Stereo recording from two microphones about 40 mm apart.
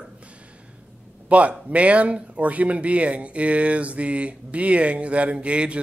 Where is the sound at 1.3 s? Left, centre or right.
Right.